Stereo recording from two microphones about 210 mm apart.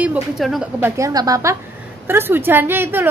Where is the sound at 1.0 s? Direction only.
15° right (ahead or behind).